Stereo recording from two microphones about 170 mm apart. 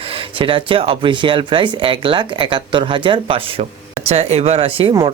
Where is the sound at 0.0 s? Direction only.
30° right (ahead or behind).